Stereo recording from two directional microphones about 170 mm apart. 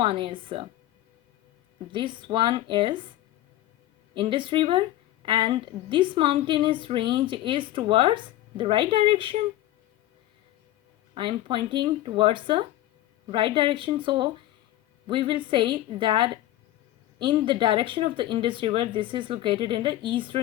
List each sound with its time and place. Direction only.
0.0 s a woman's voice: 30° right (ahead or behind)
1.9 s a woman's voice: 30° right (ahead or behind)
4.1 s a woman's voice: 30° right (ahead or behind)
11.2 s a woman's voice: 30° right (ahead or behind)